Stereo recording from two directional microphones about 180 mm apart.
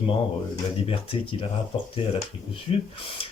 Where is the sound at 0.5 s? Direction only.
30° left (ahead or behind).